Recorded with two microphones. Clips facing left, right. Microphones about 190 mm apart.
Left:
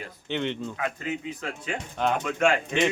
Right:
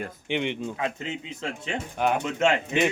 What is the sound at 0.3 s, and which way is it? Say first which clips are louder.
Speech: right 1 dB; 15° right (ahead or behind).